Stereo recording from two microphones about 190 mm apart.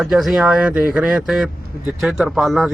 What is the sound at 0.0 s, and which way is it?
Speech, centre (ahead or behind).